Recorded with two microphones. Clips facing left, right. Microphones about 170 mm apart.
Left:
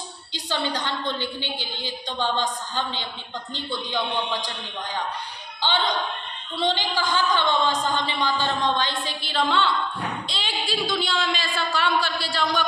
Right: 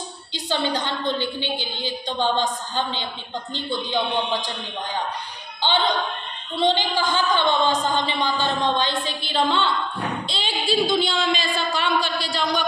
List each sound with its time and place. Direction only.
0.3 s a woman's voice: 25° right (ahead or behind)
6.5 s a woman's voice: 25° right (ahead or behind)